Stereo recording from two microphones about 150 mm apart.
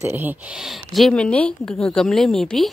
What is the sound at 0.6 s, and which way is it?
Speech, centre (ahead or behind).